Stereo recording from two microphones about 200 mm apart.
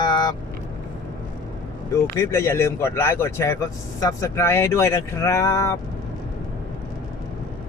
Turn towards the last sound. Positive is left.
turn(degrees=15)  # may be behind; listen again after turning